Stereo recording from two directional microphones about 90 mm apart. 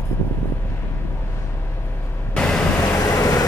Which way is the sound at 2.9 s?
35° left (ahead or behind).